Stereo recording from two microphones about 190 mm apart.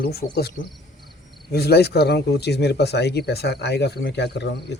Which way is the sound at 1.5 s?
55° left (ahead or behind).